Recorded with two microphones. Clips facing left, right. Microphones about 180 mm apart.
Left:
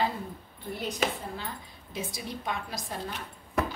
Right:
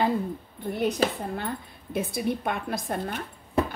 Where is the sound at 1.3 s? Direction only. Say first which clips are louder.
Right 7 dB; 55° right (ahead or behind).